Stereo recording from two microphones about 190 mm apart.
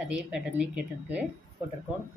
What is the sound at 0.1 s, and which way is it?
Speech, 5° right (ahead or behind).